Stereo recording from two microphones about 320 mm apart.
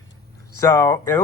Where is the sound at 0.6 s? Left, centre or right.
Centre.